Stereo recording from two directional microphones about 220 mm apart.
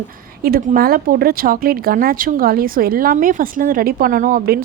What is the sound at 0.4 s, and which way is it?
Speech, 40° right (ahead or behind).